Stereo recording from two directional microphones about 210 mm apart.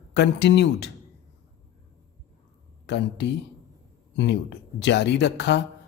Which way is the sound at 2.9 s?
55° left (ahead or behind).